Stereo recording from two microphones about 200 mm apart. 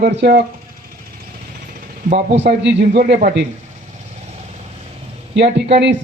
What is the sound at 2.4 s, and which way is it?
Speech, 55° right (ahead or behind).